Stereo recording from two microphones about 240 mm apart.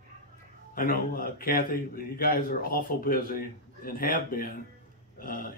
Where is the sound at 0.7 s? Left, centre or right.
Left.